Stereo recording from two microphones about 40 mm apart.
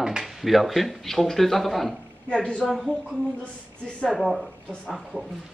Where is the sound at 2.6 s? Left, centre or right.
Centre.